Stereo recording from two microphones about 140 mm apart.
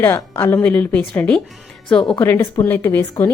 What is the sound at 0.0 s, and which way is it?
A woman's voice, 15° left (ahead or behind).